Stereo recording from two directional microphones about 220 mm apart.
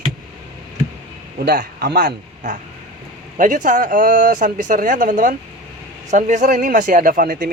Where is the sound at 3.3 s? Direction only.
35° right (ahead or behind).